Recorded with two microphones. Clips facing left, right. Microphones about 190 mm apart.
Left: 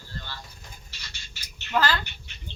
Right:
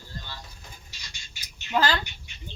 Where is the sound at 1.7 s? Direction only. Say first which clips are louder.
Even; 15° right (ahead or behind).